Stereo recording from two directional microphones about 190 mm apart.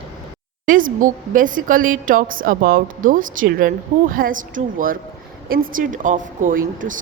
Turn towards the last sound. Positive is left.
turn(degrees=-45)  # may be behind; listen again after turning